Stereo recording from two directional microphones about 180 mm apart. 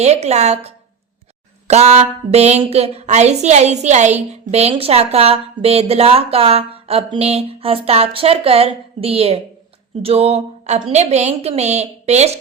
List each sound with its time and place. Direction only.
0.0 s speech: 35° right (ahead or behind)